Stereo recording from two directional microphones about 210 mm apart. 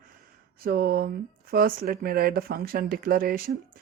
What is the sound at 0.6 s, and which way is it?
Speech, 45° right (ahead or behind).